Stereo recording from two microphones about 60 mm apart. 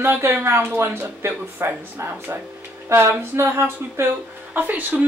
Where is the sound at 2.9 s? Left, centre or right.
Right.